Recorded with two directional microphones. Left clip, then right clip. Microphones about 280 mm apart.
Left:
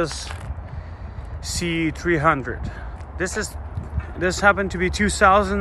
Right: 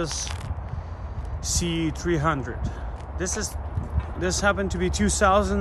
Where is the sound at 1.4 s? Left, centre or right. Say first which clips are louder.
Left 3 dB; centre.